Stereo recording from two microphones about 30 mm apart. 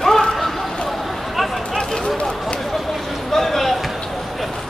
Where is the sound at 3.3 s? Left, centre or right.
Centre.